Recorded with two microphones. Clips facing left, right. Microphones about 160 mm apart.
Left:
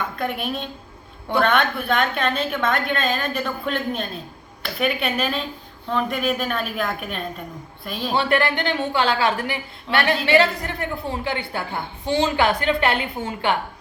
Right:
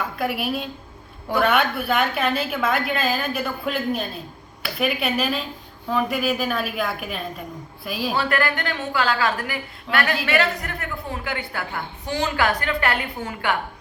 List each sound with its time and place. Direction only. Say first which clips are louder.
0.0 s a woman's voice: right 1 dB; 5° right (ahead or behind)
8.1 s a woman's voice: left 4 dB; 25° left (ahead or behind)